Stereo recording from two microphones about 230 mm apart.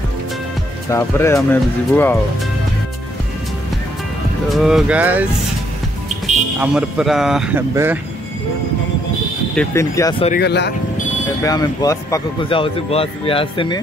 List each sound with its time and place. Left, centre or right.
0.9 s speech: centre
4.5 s speech: centre
6.6 s speech: centre
9.6 s speech: centre
10.4 s speech: left
11.4 s a man's voice: centre